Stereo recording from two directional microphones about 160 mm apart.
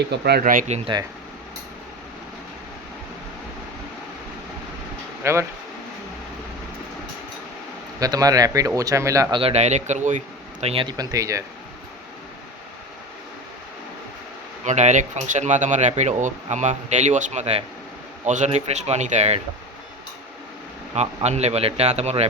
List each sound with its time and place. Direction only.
0.1 s speech: 85° right
0.9 s speech: 30° right (ahead or behind)
5.2 s speech: 15° right (ahead or behind)
7.9 s speech: 25° right (ahead or behind)
9.3 s a man's voice: 40° right (ahead or behind); by 11.4 s 20° right (ahead or behind)
14.6 s speech: 45° right (ahead or behind)
20.9 s speech: 45° right (ahead or behind)